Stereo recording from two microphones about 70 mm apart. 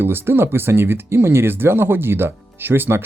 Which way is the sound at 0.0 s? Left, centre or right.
Right.